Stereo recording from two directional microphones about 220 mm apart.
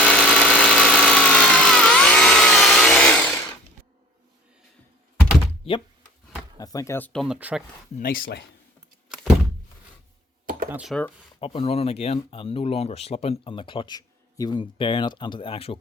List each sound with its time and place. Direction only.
0.0 s vehicle: 5° left (ahead or behind)
5.6 s speech: 25° left (ahead or behind); by 7.6 s 5° right (ahead or behind)
7.9 s speech: 40° left (ahead or behind)
10.7 s speech: 5° right (ahead or behind)
11.3 s speech: 25° left (ahead or behind)